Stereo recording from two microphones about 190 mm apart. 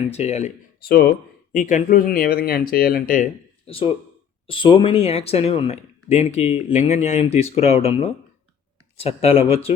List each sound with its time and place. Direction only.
0.1 s speech: 35° left (ahead or behind)
0.9 s speech: 55° left (ahead or behind)
1.6 s speech: 45° left (ahead or behind)
3.7 s speech: 30° left (ahead or behind)